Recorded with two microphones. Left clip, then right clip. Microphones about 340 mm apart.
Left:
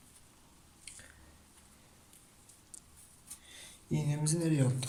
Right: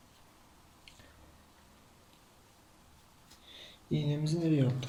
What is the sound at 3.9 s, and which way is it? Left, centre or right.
Speech, left.